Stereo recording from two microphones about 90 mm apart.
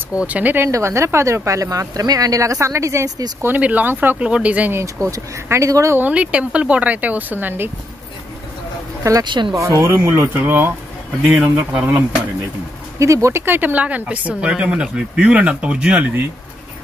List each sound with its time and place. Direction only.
0.1 s speech: 15° right (ahead or behind)
0.7 s speech: 35° right (ahead or behind)
3.5 s speech: 20° right (ahead or behind)
5.0 s speech: 30° right (ahead or behind)
5.9 s speech: 15° right (ahead or behind)
9.2 s speech: 60° right (ahead or behind)
9.6 s speech: 35° right (ahead or behind); by 12.0 s 15° right (ahead or behind)
13.0 s speech: 35° right (ahead or behind); by 16.3 s 15° right (ahead or behind)